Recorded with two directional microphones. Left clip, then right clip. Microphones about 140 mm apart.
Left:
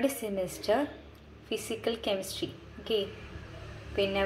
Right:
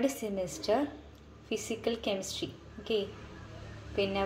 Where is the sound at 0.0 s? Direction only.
15° right (ahead or behind).